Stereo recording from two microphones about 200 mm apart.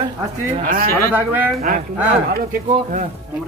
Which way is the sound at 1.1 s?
5° right (ahead or behind).